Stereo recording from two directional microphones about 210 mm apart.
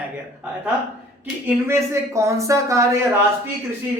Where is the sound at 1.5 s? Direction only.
10° right (ahead or behind).